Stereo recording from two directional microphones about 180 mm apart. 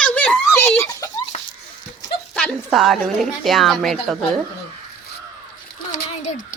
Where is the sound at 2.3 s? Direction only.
Centre (ahead or behind).